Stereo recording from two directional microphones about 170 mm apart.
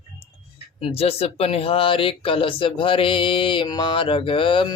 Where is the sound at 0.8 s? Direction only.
35° left (ahead or behind).